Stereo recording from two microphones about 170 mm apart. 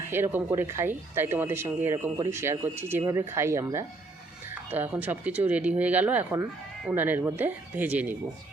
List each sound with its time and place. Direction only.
0.1 s speech: 10° right (ahead or behind)